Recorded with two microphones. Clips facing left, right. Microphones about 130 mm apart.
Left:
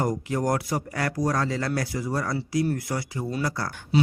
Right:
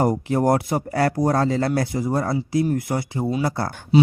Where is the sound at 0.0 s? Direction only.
30° right (ahead or behind).